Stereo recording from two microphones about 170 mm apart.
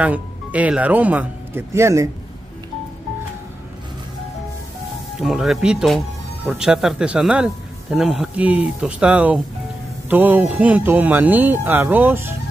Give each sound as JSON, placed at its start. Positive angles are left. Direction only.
{"t": 0.0, "sound": "speech", "side_deg": -10}
{"t": 5.2, "sound": "a man's voice", "side_deg": 0}